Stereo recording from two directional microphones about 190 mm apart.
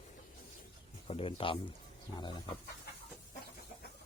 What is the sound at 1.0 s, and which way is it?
Speech, 30° left (ahead or behind).